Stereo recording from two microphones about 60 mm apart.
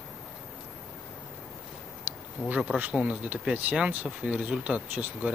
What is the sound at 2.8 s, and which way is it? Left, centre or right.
Speech, right.